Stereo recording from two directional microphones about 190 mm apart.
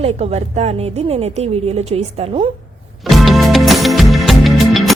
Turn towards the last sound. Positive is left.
turn(degrees=0)  # may be behind; listen again after turning